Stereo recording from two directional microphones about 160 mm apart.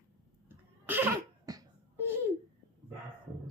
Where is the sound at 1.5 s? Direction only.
20° right (ahead or behind).